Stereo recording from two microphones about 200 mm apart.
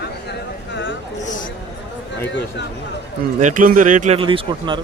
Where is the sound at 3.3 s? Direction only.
40° right (ahead or behind); by 4.8 s 25° right (ahead or behind).